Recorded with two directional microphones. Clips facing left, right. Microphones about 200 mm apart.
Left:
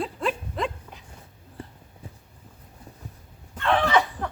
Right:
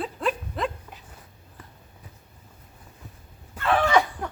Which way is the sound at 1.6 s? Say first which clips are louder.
Left 8 dB; 30° left (ahead or behind).